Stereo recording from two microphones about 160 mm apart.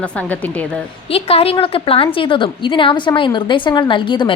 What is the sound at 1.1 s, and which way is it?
A woman's voice, 40° left (ahead or behind).